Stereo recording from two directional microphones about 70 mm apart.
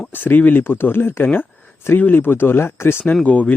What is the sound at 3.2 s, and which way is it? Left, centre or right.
Speech, left.